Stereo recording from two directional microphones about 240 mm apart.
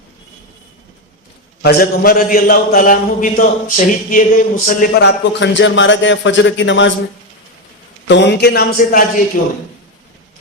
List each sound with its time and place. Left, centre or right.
1.6 s a man's voice: left
8.0 s a man's voice: left